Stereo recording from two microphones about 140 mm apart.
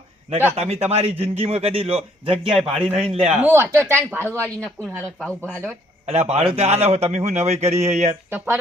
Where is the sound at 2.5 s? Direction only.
5° right (ahead or behind).